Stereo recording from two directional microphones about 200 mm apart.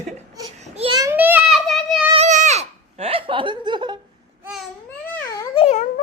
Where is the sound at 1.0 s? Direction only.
10° right (ahead or behind).